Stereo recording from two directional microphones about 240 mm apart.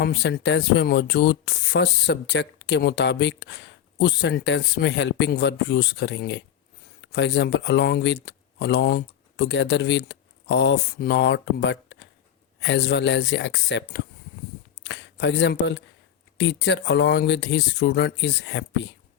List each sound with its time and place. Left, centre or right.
0.0 s speech: left